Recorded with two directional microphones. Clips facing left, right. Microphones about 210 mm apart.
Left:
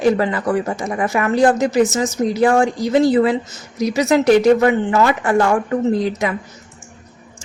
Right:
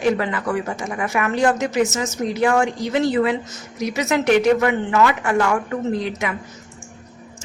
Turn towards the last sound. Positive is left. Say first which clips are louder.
# left 5 dB
turn(degrees=35)  # may be behind; listen again after turning